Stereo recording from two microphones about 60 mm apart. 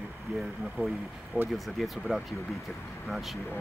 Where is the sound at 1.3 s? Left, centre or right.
Right.